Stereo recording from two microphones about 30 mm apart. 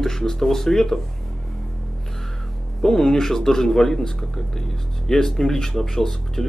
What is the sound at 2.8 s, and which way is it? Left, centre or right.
Speech, centre.